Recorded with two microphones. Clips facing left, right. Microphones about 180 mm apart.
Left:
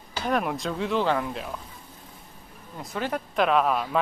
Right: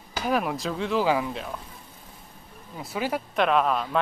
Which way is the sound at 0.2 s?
Centre (ahead or behind).